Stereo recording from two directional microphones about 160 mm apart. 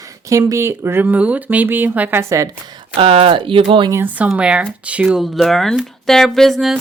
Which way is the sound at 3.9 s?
15° right (ahead or behind).